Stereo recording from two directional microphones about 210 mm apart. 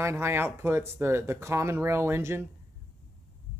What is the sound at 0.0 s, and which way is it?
Speech, 10° right (ahead or behind).